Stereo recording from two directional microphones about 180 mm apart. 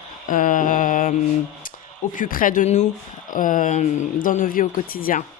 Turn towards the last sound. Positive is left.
turn(degrees=50)  # may be behind; listen again after turning